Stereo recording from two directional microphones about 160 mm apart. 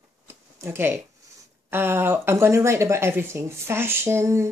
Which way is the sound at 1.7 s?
15° right (ahead or behind).